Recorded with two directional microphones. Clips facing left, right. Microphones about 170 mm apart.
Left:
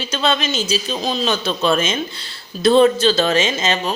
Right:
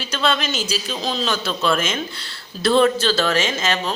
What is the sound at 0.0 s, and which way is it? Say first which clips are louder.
Speech: left 2 dB; 20° left (ahead or behind).